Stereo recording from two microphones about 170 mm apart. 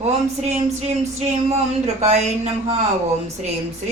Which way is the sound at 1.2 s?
40° right (ahead or behind).